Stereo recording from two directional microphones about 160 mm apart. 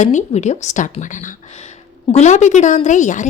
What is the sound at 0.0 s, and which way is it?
A woman's voice, 50° left (ahead or behind).